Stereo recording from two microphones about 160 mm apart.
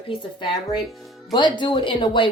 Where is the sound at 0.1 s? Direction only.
30° left (ahead or behind).